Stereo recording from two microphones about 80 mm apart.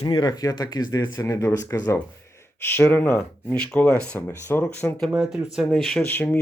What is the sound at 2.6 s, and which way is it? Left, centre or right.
Speech, left.